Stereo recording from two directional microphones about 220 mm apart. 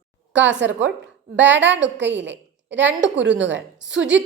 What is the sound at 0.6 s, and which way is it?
A woman's voice, 55° right (ahead or behind).